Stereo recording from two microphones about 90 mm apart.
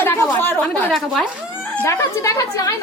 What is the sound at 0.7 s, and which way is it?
Speech, 5° left (ahead or behind).